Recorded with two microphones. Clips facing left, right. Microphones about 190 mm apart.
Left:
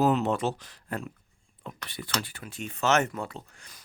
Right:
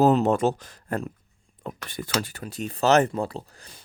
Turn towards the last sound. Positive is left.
turn(degrees=-35)  # may be behind; listen again after turning